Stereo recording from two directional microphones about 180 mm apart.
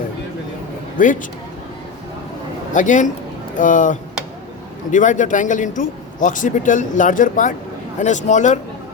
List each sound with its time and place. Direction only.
1.0 s a man's voice: 50° left (ahead or behind)
2.7 s a man's voice: 45° left (ahead or behind)